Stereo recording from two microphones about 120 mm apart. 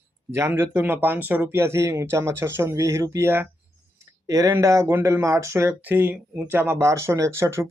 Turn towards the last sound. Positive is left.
turn(degrees=-20)  # may be behind; listen again after turning